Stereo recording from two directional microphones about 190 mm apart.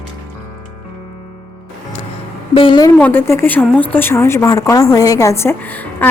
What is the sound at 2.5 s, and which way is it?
Speech, 25° left (ahead or behind).